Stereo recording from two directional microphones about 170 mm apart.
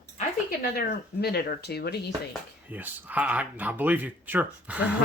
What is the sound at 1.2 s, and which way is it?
Speech, 70° left (ahead or behind).